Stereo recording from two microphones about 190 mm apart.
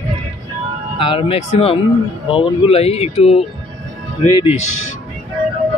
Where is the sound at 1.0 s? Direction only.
30° left (ahead or behind).